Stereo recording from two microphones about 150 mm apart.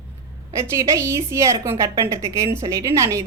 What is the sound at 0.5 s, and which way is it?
A woman's voice, 20° right (ahead or behind).